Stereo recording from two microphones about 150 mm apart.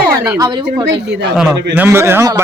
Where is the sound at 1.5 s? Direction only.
15° right (ahead or behind).